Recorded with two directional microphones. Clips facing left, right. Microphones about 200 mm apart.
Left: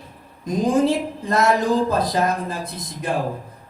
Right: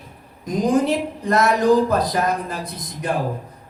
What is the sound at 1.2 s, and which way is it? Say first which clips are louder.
Speech: right 2 dB; 25° left (ahead or behind).